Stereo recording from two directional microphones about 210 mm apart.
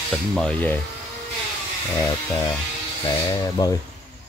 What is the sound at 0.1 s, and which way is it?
Speech, 5° left (ahead or behind).